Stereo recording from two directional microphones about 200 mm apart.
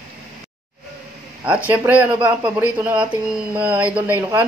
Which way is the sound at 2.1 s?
25° right (ahead or behind).